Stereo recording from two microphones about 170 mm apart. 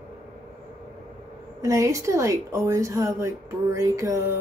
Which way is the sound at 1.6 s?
20° right (ahead or behind).